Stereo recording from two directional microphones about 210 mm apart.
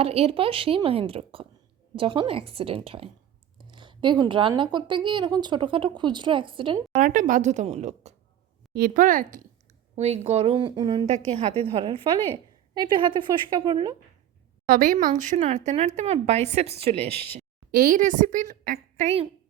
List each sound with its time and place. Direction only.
0.0 s a woman's voice: 30° right (ahead or behind)
7.0 s a woman's voice: 40° right (ahead or behind); by 11.0 s 20° right (ahead or behind)
11.0 s a woman's voice: 30° right (ahead or behind)
14.7 s speech: 40° right (ahead or behind)
17.7 s speech: 40° right (ahead or behind)